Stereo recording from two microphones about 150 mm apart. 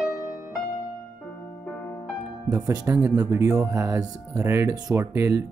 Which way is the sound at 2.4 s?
20° right (ahead or behind).